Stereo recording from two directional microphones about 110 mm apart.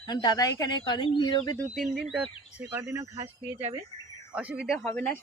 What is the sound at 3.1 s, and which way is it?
Speech, 70° right (ahead or behind).